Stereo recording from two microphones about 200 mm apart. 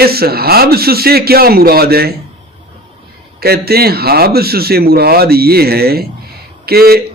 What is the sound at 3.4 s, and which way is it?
A man's voice, 50° right (ahead or behind).